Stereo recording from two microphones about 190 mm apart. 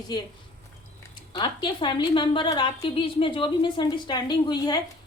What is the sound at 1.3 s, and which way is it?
A woman's voice, 25° left (ahead or behind).